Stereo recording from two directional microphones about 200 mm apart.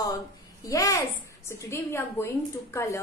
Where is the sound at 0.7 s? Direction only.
15° left (ahead or behind).